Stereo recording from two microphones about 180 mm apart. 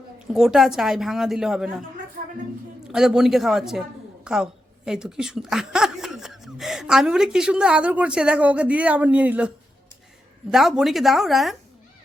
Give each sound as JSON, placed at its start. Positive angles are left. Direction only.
{"t": 0.3, "sound": "speech", "side_deg": 0}
{"t": 2.8, "sound": "a woman's voice", "side_deg": -5}
{"t": 10.5, "sound": "speech", "side_deg": 0}